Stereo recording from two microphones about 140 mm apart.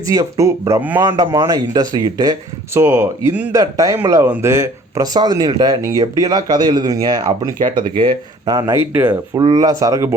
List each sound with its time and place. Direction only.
0.0 s speech: 25° right (ahead or behind)
0.8 s speech: 10° right (ahead or behind)
1.0 s speech: 30° right (ahead or behind)
8.9 s speech: 15° right (ahead or behind)
9.3 s speech: 30° right (ahead or behind)